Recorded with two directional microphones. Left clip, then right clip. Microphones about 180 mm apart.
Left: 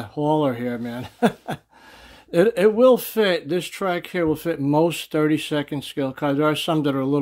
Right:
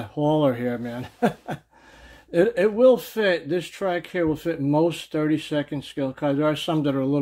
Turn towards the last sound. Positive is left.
turn(degrees=30)  # may be behind; listen again after turning